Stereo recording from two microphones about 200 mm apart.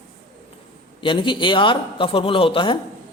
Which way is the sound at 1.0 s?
25° left (ahead or behind).